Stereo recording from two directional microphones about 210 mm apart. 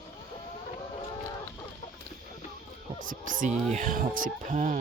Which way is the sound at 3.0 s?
40° right (ahead or behind).